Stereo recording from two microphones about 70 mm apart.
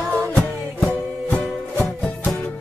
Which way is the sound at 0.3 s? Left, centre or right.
Centre.